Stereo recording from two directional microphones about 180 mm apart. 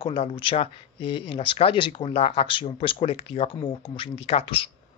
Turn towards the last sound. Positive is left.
turn(degrees=30)  # may be behind; listen again after turning